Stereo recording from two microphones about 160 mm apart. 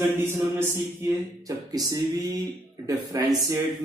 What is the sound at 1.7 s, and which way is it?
Speech, 25° right (ahead or behind).